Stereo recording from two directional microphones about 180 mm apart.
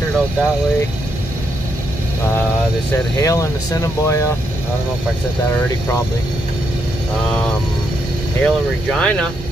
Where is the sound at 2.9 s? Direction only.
20° left (ahead or behind).